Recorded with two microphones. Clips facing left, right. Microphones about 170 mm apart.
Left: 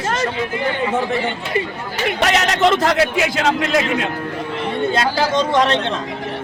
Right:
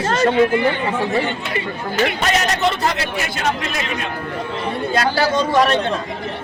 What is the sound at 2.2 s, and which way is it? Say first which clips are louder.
A man's voice: left 3 dB; 90° left.